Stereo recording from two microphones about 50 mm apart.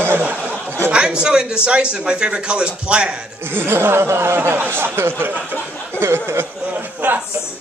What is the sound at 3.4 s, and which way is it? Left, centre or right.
Speech, right.